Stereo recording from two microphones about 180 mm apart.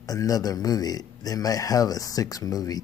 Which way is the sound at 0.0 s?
20° left (ahead or behind).